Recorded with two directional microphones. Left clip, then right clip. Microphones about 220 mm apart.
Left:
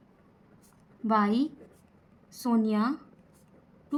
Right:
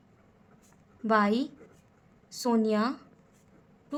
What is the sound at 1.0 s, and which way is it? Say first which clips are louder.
A woman's voice: right 1 dB; 55° right (ahead or behind).